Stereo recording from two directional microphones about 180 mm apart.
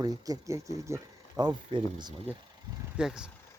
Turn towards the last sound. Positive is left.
turn(degrees=-5)  # may be behind; listen again after turning